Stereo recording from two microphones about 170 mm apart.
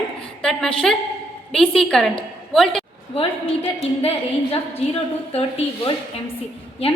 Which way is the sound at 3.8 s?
35° left (ahead or behind).